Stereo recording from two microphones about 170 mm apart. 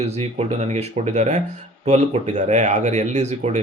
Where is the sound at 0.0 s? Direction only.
40° right (ahead or behind).